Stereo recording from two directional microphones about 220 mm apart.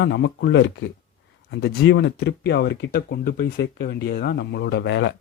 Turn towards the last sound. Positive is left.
turn(degrees=55)  # may be behind; listen again after turning